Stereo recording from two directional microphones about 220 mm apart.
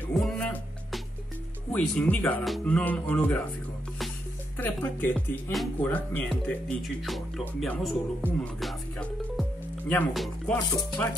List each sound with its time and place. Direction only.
0.0 s music: centre (ahead or behind)
1.7 s speech: 5° left (ahead or behind)
4.6 s speech: 10° left (ahead or behind)
8.3 s music: 5° left (ahead or behind)
10.6 s speech: 15° left (ahead or behind)